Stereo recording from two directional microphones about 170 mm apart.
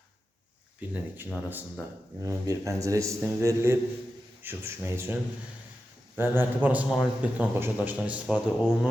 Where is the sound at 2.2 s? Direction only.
20° right (ahead or behind).